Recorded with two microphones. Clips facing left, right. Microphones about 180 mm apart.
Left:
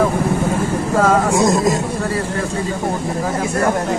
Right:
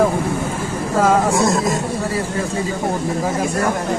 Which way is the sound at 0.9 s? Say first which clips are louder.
Even; 10° right (ahead or behind).